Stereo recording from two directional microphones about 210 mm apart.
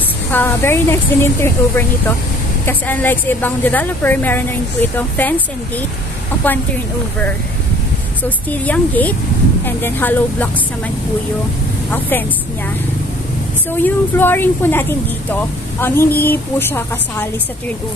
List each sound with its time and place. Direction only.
0.3 s a woman's voice: 10° left (ahead or behind)
8.2 s a woman's voice: 5° left (ahead or behind)
11.9 s a woman's voice: 10° left (ahead or behind)
13.7 s a woman's voice: 10° left (ahead or behind)